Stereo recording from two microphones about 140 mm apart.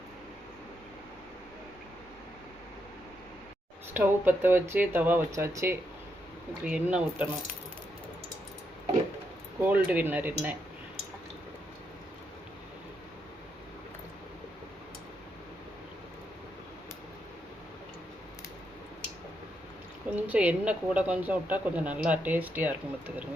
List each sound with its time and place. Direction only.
3.9 s speech: 15° right (ahead or behind)
6.7 s speech: 10° right (ahead or behind)
9.6 s speech: 10° right (ahead or behind)
20.1 s speech: 10° right (ahead or behind)